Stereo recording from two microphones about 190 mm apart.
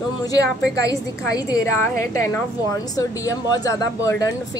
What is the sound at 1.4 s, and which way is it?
A woman's voice, 15° left (ahead or behind).